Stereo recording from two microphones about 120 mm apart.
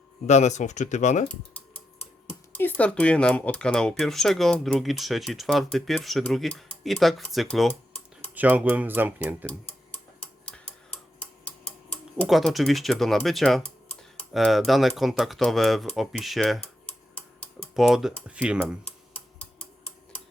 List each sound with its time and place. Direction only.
0.3 s speech: 70° left (ahead or behind)
2.5 s speech: 15° left (ahead or behind)
8.4 s speech: 15° right (ahead or behind)
10.4 s tick-tock: 10° left (ahead or behind)
12.3 s speech: centre (ahead or behind)
17.7 s speech: 5° right (ahead or behind)